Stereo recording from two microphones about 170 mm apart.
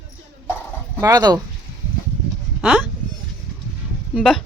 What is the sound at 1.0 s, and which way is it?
Speech, 25° right (ahead or behind).